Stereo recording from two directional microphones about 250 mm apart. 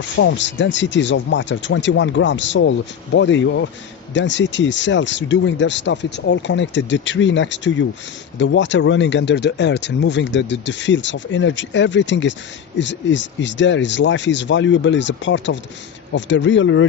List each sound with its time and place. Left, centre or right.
0.2 s speech: left